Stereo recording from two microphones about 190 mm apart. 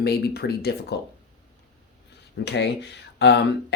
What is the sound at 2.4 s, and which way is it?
Speech, 65° left (ahead or behind).